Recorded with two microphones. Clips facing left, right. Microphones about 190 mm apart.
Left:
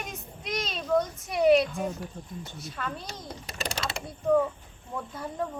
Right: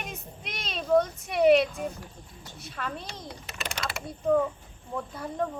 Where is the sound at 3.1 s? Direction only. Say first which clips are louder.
Left 1 dB; 40° left (ahead or behind).